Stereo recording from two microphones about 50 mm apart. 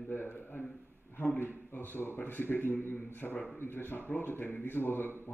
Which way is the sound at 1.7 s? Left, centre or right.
Left.